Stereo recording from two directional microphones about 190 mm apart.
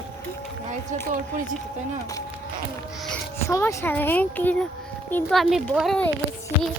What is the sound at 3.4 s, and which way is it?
A woman's voice, 15° left (ahead or behind).